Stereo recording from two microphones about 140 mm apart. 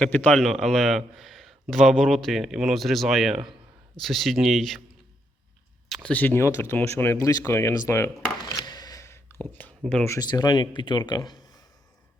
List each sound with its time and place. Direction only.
0.0 s speech: 10° left (ahead or behind)
5.9 s speech: 5° left (ahead or behind)
9.8 s speech: centre (ahead or behind)
10.1 s speech: 25° left (ahead or behind)